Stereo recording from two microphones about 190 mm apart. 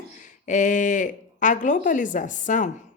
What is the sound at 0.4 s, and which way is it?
A woman's voice, 40° left (ahead or behind).